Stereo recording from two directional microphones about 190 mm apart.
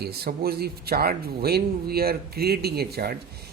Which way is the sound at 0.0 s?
55° right (ahead or behind).